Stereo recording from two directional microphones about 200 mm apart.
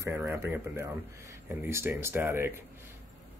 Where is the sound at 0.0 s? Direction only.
15° right (ahead or behind).